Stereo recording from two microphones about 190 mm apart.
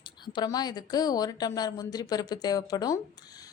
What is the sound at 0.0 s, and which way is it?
A woman's voice, 25° left (ahead or behind).